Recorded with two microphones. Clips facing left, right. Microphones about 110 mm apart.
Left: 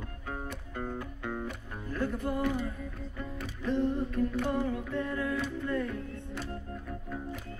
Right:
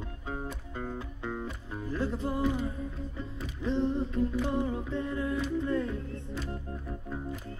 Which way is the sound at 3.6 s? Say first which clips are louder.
Even; 20° right (ahead or behind).